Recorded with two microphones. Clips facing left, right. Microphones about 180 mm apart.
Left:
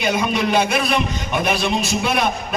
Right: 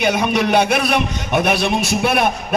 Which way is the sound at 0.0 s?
60° right (ahead or behind).